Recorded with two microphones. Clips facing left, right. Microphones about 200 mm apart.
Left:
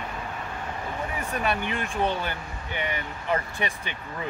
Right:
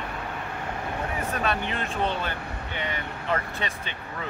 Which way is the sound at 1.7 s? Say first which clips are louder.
Left 1 dB; 15° left (ahead or behind).